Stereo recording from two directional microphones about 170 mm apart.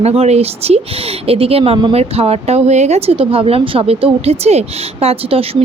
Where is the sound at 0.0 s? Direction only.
35° right (ahead or behind).